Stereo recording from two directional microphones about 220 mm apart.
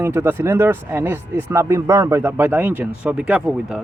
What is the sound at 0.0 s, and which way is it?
Speech, 10° right (ahead or behind).